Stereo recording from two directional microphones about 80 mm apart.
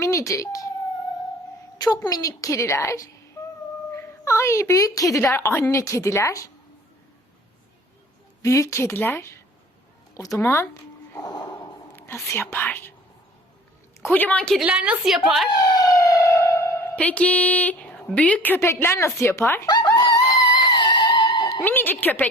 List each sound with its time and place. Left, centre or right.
0.0 s speech: left
1.8 s a woman's voice: left
8.4 s a woman's voice: left
10.2 s a woman's voice: left
11.1 s snort: left
11.9 s speech: left
14.1 s a woman's voice: centre
14.6 s a woman's voice: centre
15.0 s speech: centre
15.4 s siren: left
16.9 s a woman's voice: centre
18.6 s a woman's voice: left
19.6 s a sound: left
21.6 s a woman's voice: left